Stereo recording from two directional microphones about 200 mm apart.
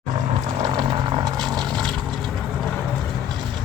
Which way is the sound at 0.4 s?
20° right (ahead or behind).